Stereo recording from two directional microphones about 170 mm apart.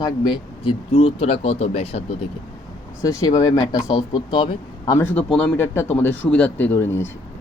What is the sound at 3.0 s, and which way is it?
Speech, 20° left (ahead or behind).